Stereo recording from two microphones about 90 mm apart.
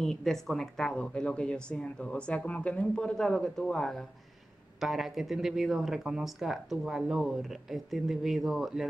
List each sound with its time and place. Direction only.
0.0 s speech: 5° left (ahead or behind)